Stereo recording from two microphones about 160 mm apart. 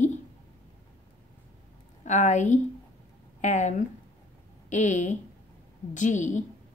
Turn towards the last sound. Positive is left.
turn(degrees=50)  # may be behind; listen again after turning